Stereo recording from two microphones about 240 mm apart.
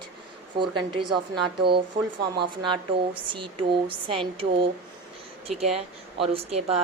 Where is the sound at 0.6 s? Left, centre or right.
Centre.